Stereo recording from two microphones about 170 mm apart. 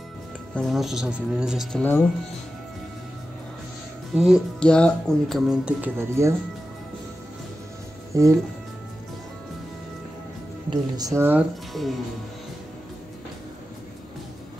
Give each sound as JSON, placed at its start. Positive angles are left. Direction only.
{"t": 0.6, "sound": "speech", "side_deg": 0}
{"t": 4.1, "sound": "speech", "side_deg": 0}
{"t": 8.1, "sound": "speech", "side_deg": -20}
{"t": 10.7, "sound": "speech", "side_deg": -20}